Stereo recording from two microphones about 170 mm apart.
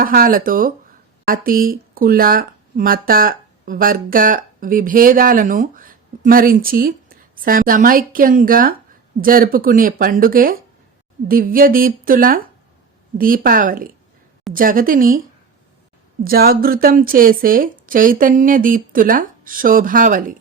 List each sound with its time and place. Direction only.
0.0 s a woman's voice: 55° right (ahead or behind)
16.2 s a woman's voice: 60° right (ahead or behind)